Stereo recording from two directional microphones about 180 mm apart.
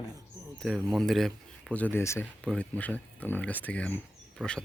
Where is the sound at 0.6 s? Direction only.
Centre (ahead or behind).